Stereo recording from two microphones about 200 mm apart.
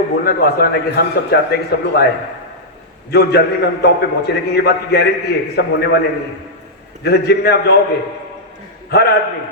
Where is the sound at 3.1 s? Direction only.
50° left (ahead or behind).